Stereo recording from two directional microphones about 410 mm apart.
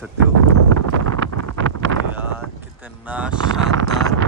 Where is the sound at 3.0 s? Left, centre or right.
Centre.